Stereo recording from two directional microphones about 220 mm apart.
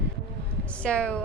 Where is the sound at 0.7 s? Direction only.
5° left (ahead or behind).